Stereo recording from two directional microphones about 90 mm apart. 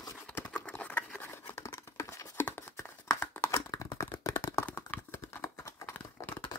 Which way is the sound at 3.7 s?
35° left (ahead or behind).